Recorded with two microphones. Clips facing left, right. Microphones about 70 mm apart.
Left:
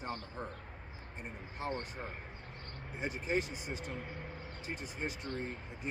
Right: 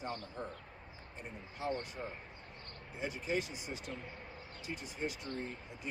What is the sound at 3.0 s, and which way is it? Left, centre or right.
Speech, left.